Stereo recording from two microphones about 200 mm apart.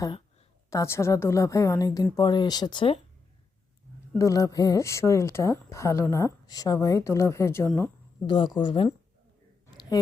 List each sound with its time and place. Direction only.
0.7 s a woman's voice: 15° left (ahead or behind)
4.1 s a woman's voice: 15° left (ahead or behind)